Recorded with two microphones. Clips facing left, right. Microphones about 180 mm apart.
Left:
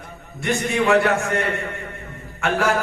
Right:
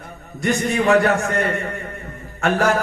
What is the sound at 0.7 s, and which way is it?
Speech, 35° right (ahead or behind).